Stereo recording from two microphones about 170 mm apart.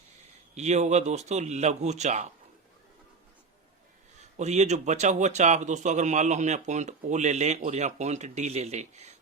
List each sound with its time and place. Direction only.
0.5 s speech: 40° right (ahead or behind)
4.4 s speech: 40° right (ahead or behind)